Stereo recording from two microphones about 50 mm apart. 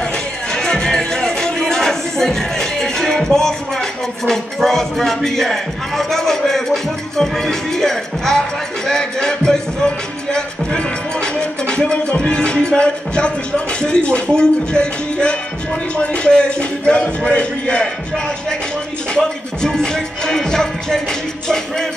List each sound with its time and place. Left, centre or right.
0.5 s music: centre
4.3 s a man's voice: centre
19.1 s music: centre